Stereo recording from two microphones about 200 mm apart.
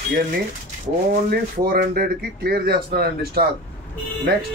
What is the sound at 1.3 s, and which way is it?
Speech, 45° right (ahead or behind).